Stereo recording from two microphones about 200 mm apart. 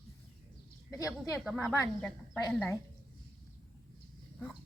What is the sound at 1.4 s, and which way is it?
Speech, centre (ahead or behind).